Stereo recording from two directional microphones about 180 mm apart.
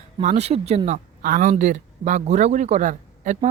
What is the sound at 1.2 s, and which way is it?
A woman's voice, 50° right (ahead or behind).